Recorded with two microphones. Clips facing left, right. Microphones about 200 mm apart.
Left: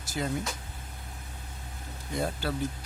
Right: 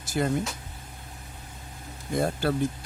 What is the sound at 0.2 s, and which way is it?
Speech, 55° right (ahead or behind).